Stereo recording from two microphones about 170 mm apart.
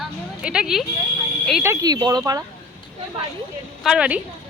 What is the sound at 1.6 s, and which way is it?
Speech, 20° right (ahead or behind).